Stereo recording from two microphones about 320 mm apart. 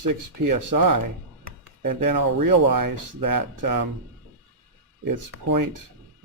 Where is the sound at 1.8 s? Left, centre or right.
Right.